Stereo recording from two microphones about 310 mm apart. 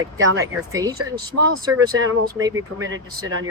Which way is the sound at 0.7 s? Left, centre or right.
Centre.